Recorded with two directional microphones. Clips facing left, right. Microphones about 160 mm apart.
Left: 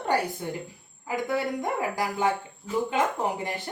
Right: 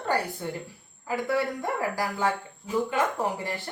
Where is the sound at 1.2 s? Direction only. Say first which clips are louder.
Even; 20° left (ahead or behind).